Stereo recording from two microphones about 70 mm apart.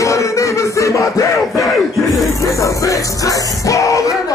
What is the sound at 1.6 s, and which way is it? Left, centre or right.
Music, centre.